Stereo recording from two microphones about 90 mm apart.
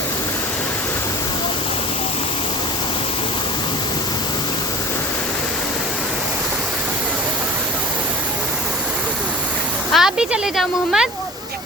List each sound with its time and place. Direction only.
9.9 s speech: 5° right (ahead or behind)